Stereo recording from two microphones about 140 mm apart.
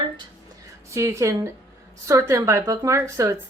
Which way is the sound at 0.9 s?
20° right (ahead or behind).